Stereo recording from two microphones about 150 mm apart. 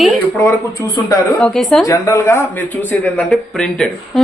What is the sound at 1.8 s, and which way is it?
A woman's voice, 20° left (ahead or behind).